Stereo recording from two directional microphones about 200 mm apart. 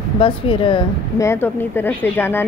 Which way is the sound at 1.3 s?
10° left (ahead or behind).